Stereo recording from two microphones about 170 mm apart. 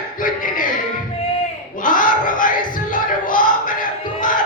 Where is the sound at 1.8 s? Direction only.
50° left (ahead or behind).